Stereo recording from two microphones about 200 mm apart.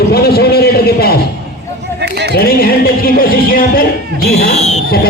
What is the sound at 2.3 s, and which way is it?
A man's voice, 50° left (ahead or behind).